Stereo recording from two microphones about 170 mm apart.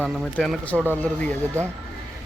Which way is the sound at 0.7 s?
10° right (ahead or behind).